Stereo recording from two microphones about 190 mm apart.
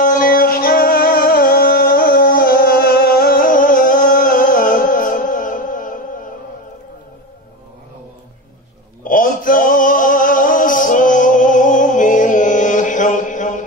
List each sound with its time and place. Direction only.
0.0 s music: 45° left (ahead or behind)
9.0 s male singing: 45° left (ahead or behind)